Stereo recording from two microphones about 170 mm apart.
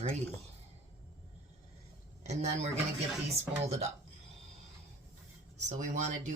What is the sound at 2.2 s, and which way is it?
Speech, 40° right (ahead or behind).